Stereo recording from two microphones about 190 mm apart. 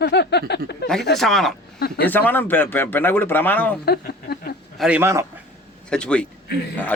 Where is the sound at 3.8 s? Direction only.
55° left (ahead or behind).